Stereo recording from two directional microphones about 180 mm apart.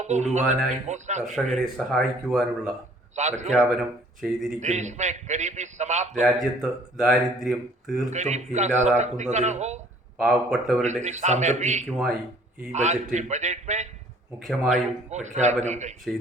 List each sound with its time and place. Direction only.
0.0 s a man's voice: 40° right (ahead or behind)
1.5 s speech: centre (ahead or behind)
3.2 s a man's voice: 40° right (ahead or behind)
4.2 s speech: centre (ahead or behind)
4.6 s a man's voice: 40° right (ahead or behind)
6.2 s speech: centre (ahead or behind)
8.1 s a man's voice: 40° right (ahead or behind)
10.2 s speech: centre (ahead or behind)
11.0 s a man's voice: 40° right (ahead or behind)
14.3 s speech: 5° right (ahead or behind)
14.7 s a man's voice: 40° right (ahead or behind)